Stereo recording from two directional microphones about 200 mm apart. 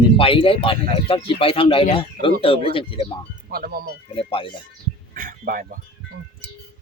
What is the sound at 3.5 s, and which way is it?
Speech, 50° right (ahead or behind).